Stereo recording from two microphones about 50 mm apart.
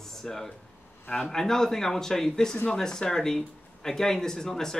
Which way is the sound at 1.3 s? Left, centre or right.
Centre.